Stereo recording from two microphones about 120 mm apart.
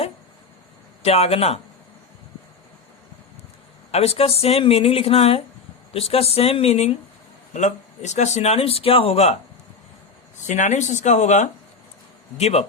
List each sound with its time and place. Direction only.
1.0 s a man's voice: 60° left (ahead or behind)
3.9 s a man's voice: 55° left (ahead or behind)
7.5 s a man's voice: 75° left (ahead or behind); by 9.4 s 60° left (ahead or behind)
10.4 s speech: 85° left
12.4 s a man's voice: 60° left (ahead or behind)